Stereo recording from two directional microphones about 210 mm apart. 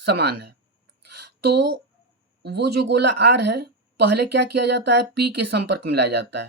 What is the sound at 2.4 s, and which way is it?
Speech, 50° right (ahead or behind).